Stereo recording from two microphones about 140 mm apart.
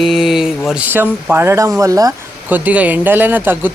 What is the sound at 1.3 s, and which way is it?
Speech, 20° right (ahead or behind).